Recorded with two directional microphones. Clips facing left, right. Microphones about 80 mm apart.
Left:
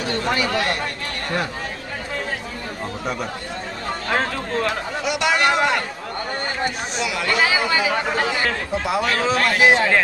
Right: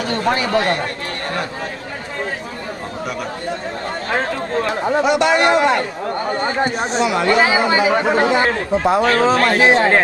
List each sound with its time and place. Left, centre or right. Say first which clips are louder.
0.1 s speech: right 5 dB; right
4.9 s speech: right 8 dB; right